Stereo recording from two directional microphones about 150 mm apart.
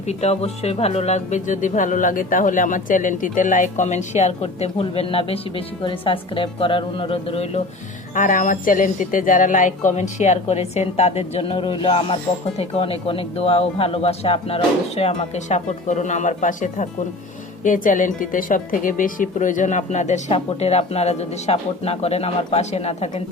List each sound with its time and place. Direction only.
0.1 s a woman's voice: 45° left (ahead or behind)
8.1 s a woman's voice: 60° left (ahead or behind); by 23.2 s 45° left (ahead or behind)